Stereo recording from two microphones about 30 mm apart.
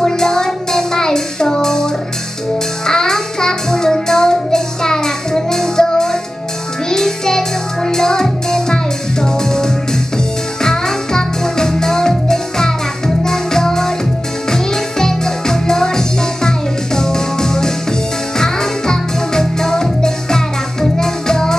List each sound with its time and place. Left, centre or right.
0.0 s music: centre
2.9 s child singing: centre
6.9 s music: centre